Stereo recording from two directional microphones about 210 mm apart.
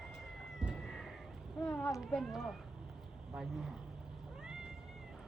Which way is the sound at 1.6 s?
5° left (ahead or behind).